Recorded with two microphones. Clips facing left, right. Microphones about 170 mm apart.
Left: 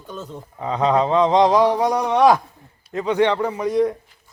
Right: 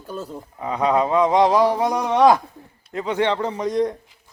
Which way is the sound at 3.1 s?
15° left (ahead or behind).